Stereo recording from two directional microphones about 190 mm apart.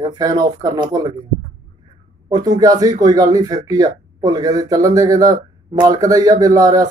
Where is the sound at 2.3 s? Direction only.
20° right (ahead or behind).